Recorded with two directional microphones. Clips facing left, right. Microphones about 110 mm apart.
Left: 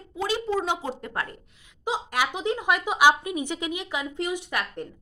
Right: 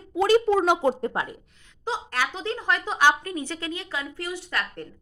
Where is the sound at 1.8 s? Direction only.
15° left (ahead or behind).